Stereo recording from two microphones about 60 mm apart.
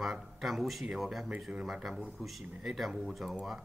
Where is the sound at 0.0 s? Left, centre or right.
Centre.